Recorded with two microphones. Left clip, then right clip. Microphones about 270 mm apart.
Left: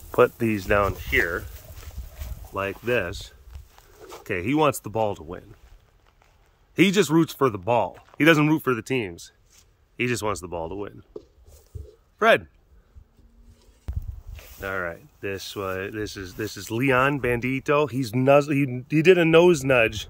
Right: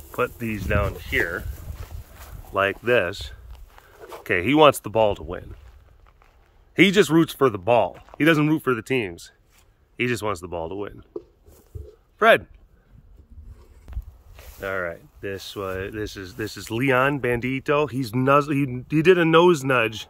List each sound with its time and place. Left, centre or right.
0.1 s speech: left; by 1.4 s centre
1.8 s a sound: centre
6.7 s speech: centre
7.9 s a sound: centre
8.2 s speech: centre
12.2 s speech: centre
13.9 s walk: centre
14.3 s speech: centre